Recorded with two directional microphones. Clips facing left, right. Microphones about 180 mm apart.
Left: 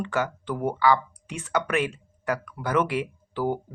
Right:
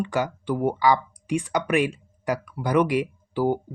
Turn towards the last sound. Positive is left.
turn(degrees=-10)  # may be behind; listen again after turning